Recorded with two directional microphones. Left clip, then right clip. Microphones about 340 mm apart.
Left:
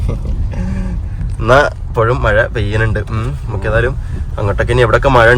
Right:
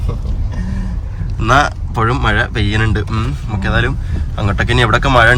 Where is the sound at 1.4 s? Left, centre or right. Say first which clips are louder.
Left 2 dB; centre.